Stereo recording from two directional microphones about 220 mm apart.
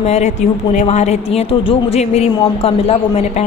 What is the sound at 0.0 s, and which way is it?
A woman's voice, 30° left (ahead or behind).